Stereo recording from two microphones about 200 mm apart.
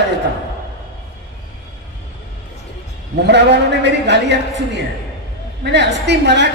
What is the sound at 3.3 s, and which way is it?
A woman's voice, 60° right (ahead or behind).